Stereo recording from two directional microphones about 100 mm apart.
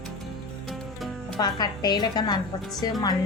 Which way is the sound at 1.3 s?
45° left (ahead or behind).